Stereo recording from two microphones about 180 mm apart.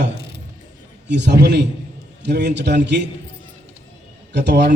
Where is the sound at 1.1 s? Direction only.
70° right (ahead or behind).